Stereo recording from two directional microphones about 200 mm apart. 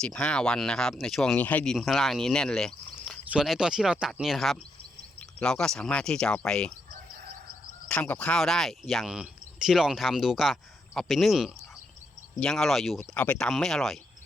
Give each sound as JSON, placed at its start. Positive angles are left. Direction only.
{"t": 0.0, "sound": "speech", "side_deg": 5}
{"t": 7.9, "sound": "speech", "side_deg": 5}